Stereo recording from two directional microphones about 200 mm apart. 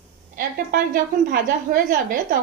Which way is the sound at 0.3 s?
50° right (ahead or behind).